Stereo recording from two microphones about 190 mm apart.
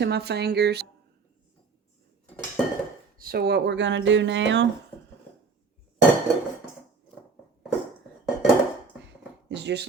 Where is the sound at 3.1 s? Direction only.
55° right (ahead or behind); by 4.7 s 70° right (ahead or behind).